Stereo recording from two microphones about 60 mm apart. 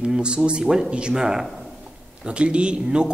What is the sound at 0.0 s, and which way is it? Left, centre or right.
Speech, centre.